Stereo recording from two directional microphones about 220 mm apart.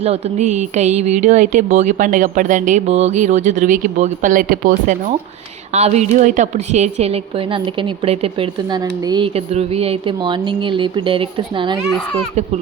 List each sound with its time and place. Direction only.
0.0 s a woman's voice: 30° right (ahead or behind)